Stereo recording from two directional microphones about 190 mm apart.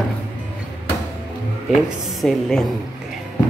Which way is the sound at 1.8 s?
Centre (ahead or behind).